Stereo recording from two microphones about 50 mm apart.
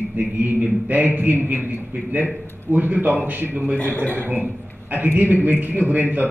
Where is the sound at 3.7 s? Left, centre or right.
Left.